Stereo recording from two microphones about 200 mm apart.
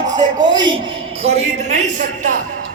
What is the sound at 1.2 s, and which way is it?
Speech, 30° right (ahead or behind).